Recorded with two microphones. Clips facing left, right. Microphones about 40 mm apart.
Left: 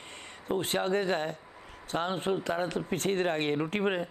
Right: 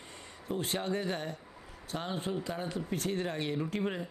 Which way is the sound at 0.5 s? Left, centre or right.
Left.